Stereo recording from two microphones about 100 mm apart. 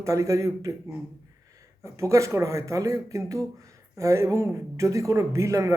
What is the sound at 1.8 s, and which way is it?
Speech, 30° right (ahead or behind).